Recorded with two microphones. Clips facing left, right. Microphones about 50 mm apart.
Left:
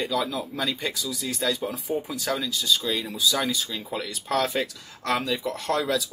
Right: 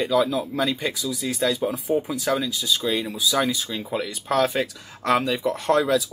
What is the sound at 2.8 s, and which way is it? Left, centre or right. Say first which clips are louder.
Speech: right 4 dB; centre.